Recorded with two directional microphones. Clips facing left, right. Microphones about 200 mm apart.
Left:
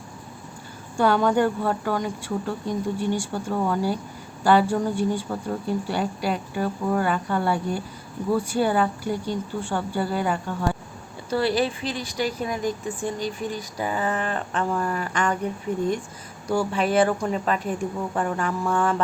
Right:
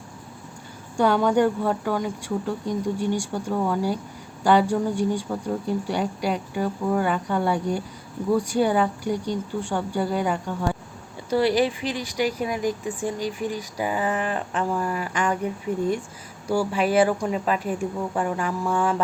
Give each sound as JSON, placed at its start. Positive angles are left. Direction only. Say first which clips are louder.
{"t": 0.9, "sound": "speech", "louder": "right 1 dB", "side_deg": -15}